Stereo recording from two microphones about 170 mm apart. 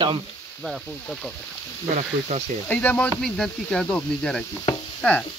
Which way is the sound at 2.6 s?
10° left (ahead or behind).